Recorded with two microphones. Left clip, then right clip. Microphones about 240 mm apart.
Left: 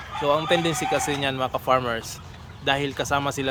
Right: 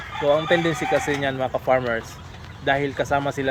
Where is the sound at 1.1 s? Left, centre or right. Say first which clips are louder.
Right 2 dB; centre.